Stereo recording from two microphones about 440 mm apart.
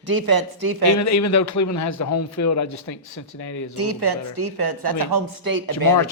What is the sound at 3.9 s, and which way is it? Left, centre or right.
A woman's voice, right.